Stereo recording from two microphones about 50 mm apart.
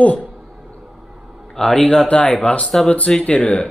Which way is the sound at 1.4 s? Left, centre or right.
Centre.